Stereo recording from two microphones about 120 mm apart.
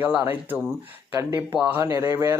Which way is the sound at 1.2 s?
20° right (ahead or behind).